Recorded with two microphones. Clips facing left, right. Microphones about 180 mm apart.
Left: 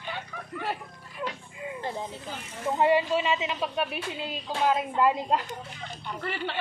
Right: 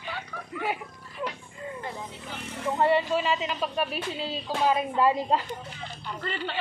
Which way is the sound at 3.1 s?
Centre (ahead or behind).